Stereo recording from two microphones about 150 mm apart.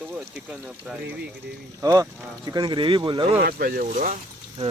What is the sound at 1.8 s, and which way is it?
Speech, 20° right (ahead or behind).